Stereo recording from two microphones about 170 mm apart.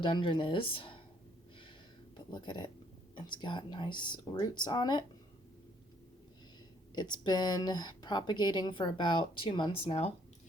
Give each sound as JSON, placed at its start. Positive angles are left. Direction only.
{"t": 0.0, "sound": "speech", "side_deg": 30}
{"t": 2.1, "sound": "speech", "side_deg": 25}
{"t": 6.9, "sound": "speech", "side_deg": 25}